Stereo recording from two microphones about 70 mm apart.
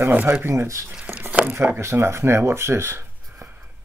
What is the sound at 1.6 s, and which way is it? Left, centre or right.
Speech, right.